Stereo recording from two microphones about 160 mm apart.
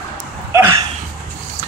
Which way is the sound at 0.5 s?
20° right (ahead or behind).